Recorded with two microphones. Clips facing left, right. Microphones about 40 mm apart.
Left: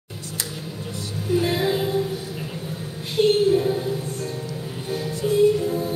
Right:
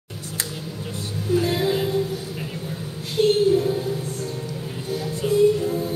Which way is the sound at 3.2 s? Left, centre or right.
Left.